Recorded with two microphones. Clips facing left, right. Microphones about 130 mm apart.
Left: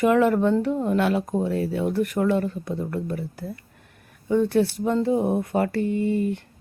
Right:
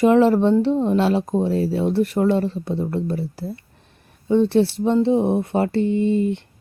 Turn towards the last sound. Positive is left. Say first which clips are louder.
# right 4 dB
turn(degrees=-25)  # may be behind; listen again after turning